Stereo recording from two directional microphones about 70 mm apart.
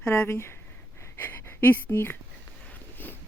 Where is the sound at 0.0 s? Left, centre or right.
Left.